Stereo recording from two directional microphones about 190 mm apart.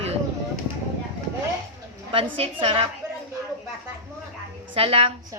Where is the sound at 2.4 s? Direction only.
30° right (ahead or behind).